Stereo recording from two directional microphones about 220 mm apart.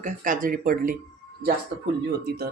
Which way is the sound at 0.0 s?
40° right (ahead or behind).